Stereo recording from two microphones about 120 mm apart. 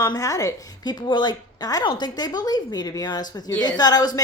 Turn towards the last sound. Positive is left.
turn(degrees=35)  # may be behind; listen again after turning